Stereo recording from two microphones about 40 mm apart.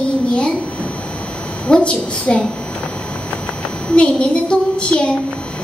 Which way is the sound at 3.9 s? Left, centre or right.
Left.